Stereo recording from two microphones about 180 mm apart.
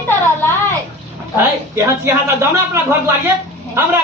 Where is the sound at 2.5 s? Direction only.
15° right (ahead or behind).